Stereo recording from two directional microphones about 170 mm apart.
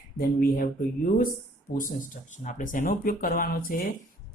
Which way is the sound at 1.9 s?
50° left (ahead or behind).